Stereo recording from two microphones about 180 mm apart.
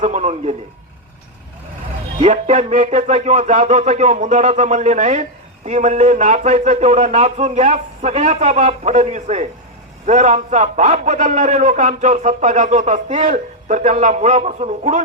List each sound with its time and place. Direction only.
0.0 s a man's voice: 40° right (ahead or behind)
2.2 s a man's voice: 40° right (ahead or behind)